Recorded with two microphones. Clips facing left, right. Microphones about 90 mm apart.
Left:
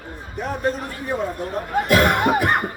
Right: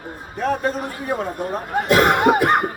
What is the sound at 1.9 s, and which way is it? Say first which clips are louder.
Speech: right 3 dB; 30° right (ahead or behind).